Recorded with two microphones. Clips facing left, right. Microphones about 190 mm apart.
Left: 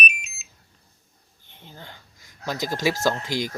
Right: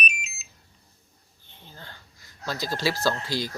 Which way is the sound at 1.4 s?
15° left (ahead or behind).